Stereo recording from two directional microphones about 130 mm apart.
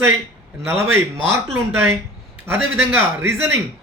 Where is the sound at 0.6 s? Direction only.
15° right (ahead or behind).